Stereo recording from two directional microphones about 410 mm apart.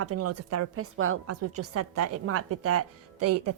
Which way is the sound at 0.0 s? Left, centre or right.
Right.